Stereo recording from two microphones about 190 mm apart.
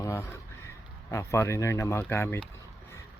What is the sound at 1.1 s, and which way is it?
Speech, 15° left (ahead or behind).